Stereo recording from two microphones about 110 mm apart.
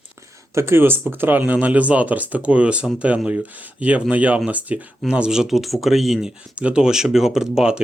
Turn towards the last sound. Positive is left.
turn(degrees=-5)  # may be behind; listen again after turning